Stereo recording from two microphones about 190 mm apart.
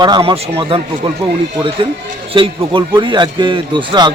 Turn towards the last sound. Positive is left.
turn(degrees=-25)  # may be behind; listen again after turning